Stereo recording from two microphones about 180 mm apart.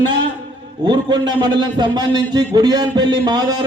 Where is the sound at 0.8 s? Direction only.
25° right (ahead or behind).